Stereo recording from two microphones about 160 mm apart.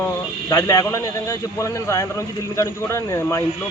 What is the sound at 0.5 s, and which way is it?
A man's voice, 20° left (ahead or behind).